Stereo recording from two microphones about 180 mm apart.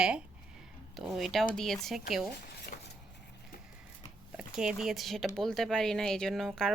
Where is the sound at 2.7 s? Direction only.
50° left (ahead or behind).